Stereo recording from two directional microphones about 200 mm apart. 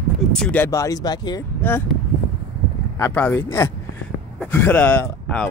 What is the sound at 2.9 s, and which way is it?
Speech, 10° left (ahead or behind).